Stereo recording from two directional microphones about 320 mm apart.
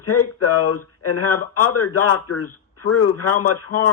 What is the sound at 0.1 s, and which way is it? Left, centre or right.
Speech, left.